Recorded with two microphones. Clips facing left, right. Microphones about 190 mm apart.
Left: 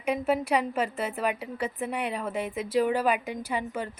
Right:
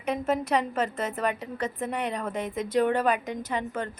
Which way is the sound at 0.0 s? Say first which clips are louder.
Left 1 dB; 10° left (ahead or behind).